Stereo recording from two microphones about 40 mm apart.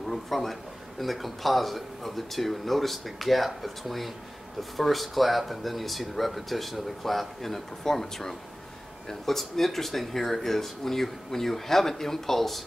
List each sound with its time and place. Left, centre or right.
0.1 s a man's voice: centre